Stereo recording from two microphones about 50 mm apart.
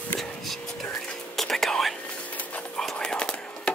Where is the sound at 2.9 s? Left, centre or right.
Centre.